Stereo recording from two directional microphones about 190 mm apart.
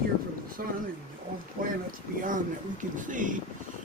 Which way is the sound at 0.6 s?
50° right (ahead or behind).